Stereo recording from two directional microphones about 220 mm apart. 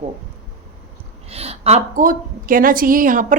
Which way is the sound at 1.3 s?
30° right (ahead or behind).